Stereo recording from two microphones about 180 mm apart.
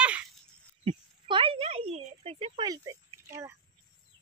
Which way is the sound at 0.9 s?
30° right (ahead or behind).